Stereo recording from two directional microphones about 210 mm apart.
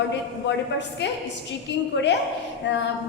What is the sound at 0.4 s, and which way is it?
Speech, 55° left (ahead or behind).